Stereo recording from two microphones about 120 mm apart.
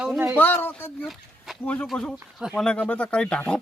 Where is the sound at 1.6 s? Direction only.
10° left (ahead or behind).